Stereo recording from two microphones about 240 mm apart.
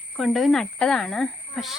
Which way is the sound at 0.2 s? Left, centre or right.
Centre.